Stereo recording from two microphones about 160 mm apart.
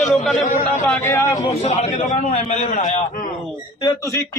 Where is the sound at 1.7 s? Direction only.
45° left (ahead or behind).